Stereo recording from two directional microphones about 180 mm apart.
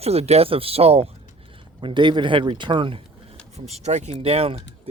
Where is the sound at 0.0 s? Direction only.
35° right (ahead or behind).